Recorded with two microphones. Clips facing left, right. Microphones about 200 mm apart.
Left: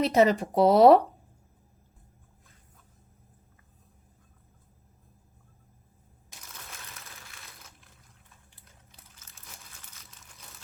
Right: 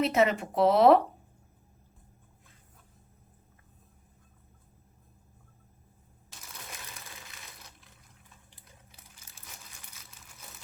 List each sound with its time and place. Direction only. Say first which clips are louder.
0.0 s speech: left 3 dB; 35° left (ahead or behind)
9.6 s crumpling: even; centre (ahead or behind)